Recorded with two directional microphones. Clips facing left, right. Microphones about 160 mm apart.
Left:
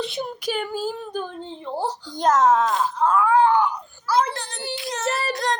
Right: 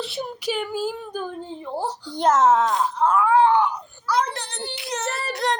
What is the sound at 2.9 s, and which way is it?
Groan, 20° right (ahead or behind).